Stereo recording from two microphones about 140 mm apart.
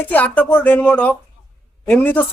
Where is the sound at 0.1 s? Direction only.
10° left (ahead or behind).